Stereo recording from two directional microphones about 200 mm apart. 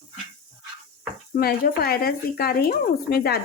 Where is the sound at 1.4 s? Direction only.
50° left (ahead or behind).